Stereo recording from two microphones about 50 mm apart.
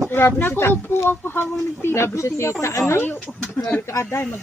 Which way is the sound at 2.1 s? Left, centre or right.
Left.